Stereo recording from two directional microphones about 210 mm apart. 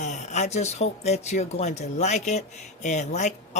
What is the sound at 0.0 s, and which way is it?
Speech, 35° left (ahead or behind).